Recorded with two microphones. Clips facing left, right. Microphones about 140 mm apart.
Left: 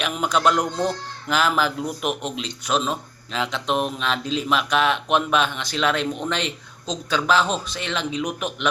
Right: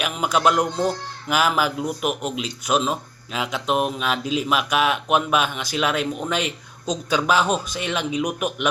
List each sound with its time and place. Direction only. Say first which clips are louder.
0.0 s speech: right 1 dB; 10° right (ahead or behind)